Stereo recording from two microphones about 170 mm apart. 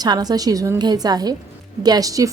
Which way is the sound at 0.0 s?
25° right (ahead or behind).